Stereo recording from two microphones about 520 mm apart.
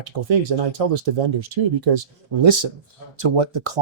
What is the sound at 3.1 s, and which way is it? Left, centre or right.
Speech, right.